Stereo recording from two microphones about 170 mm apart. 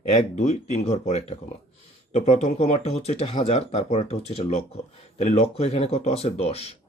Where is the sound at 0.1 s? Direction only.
40° left (ahead or behind).